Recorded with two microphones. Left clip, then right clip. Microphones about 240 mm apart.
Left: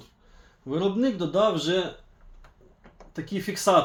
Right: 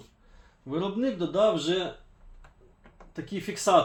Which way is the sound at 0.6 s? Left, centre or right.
Left.